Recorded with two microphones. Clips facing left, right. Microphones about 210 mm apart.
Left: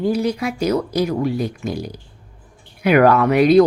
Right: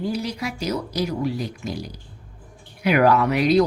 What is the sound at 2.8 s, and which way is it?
Speech, 55° left (ahead or behind).